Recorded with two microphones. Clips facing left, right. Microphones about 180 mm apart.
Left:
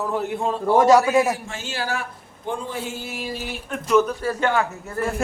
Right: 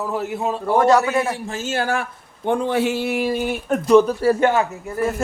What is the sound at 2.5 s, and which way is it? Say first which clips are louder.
A man's voice: right 9 dB; 70° right (ahead or behind).